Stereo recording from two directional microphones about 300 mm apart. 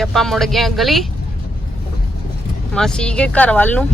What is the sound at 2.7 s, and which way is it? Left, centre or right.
Speech, centre.